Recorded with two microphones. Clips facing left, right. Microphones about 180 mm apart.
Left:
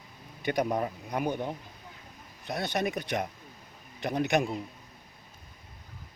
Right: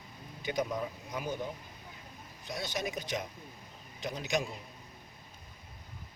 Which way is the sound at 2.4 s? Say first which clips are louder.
Left 6 dB; 60° left (ahead or behind).